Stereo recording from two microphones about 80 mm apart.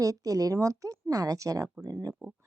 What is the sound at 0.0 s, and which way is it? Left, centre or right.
Speech, right.